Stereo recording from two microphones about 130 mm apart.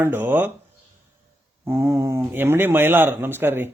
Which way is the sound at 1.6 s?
25° right (ahead or behind).